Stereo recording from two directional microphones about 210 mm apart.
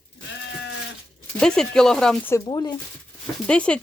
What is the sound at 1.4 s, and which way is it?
Speech, 5° left (ahead or behind).